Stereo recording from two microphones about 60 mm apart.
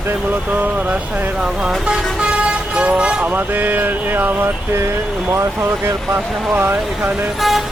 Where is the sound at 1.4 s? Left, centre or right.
Centre.